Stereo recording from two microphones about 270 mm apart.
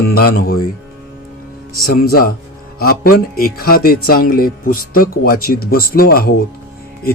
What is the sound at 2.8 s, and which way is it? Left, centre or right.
A man's voice, left.